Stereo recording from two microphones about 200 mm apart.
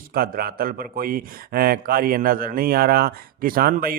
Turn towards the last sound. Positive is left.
turn(degrees=-45)  # may be behind; listen again after turning